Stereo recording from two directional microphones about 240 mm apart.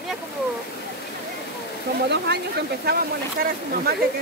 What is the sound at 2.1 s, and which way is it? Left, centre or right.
Speech, right.